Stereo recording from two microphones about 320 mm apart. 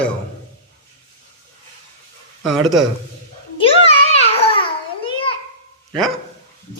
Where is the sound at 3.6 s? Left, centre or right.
Centre.